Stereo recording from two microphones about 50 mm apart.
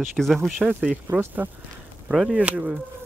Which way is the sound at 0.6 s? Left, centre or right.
Right.